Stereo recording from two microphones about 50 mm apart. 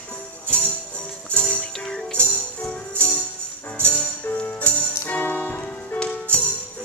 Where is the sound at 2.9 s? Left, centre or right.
Left.